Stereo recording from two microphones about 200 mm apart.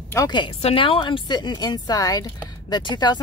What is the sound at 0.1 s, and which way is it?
Speech, 20° left (ahead or behind).